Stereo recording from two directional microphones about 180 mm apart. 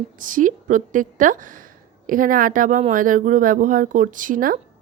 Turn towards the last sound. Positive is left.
turn(degrees=-50)  # may be behind; listen again after turning